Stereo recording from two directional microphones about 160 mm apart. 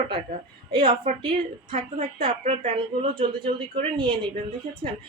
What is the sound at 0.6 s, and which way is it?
A woman's voice, 35° right (ahead or behind).